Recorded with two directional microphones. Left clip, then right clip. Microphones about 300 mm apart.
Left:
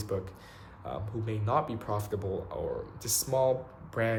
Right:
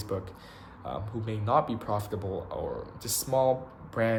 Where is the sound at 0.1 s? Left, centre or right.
Centre.